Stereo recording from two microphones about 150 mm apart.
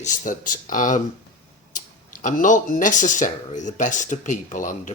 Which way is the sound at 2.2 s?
60° left (ahead or behind).